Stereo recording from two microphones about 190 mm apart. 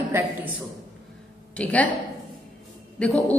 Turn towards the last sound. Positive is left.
turn(degrees=5)  # may be behind; listen again after turning